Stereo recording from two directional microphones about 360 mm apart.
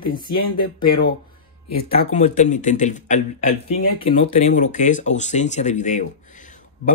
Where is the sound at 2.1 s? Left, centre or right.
Centre.